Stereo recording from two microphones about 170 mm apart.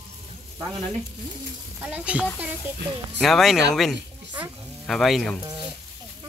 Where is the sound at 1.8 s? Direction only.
10° right (ahead or behind).